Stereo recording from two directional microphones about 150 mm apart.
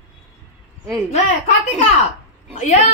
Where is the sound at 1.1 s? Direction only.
50° left (ahead or behind).